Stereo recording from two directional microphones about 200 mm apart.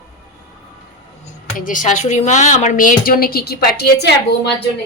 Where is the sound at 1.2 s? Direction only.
40° left (ahead or behind).